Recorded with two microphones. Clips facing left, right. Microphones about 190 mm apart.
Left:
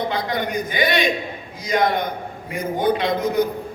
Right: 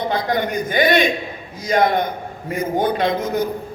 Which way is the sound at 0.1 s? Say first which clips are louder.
Right 3 dB; 50° right (ahead or behind).